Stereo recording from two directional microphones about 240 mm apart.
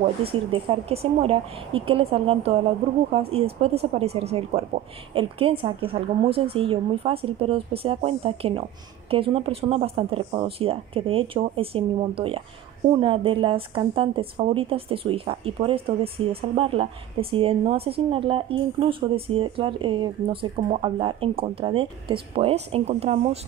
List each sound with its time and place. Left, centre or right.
0.0 s speech: right